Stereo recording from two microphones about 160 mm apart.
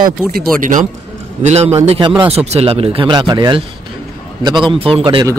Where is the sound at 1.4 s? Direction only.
40° right (ahead or behind).